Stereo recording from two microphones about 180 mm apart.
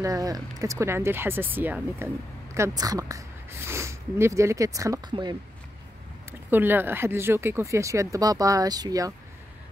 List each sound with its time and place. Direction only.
0.0 s speech: 20° right (ahead or behind)
6.5 s speech: 10° right (ahead or behind)